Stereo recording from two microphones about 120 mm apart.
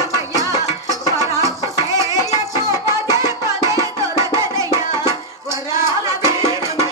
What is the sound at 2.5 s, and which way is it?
Music, 25° right (ahead or behind).